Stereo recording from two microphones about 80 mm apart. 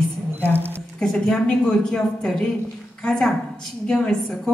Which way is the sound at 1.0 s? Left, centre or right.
Centre.